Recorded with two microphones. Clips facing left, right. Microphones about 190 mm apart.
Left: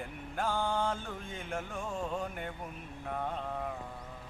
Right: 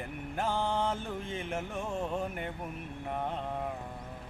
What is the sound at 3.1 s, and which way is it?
Mantra, 15° right (ahead or behind).